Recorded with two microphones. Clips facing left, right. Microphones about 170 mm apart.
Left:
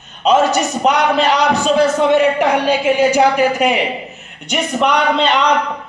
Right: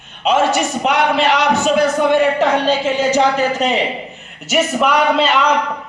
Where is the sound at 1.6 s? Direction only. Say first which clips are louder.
Left 1 dB; 30° left (ahead or behind); by 3.8 s 10° left (ahead or behind).